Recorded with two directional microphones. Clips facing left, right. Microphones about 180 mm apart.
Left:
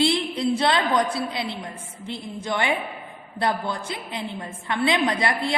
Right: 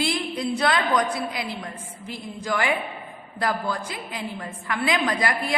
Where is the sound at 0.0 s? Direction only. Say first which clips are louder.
Left 4 dB; 25° left (ahead or behind).